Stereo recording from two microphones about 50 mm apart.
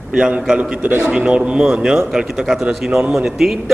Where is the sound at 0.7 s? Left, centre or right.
Right.